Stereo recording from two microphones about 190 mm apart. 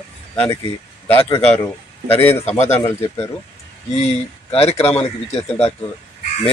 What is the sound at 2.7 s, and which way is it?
Speech, 10° left (ahead or behind).